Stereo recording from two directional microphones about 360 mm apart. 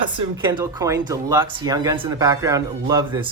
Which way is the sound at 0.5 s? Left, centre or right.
Centre.